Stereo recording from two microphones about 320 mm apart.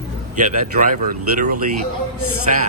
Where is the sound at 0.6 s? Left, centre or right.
Right.